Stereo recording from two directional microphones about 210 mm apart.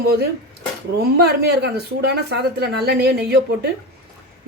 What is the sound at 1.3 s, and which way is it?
A woman's voice, 50° right (ahead or behind).